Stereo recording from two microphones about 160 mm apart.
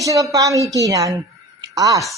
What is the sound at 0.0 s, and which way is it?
A woman's voice, 20° right (ahead or behind).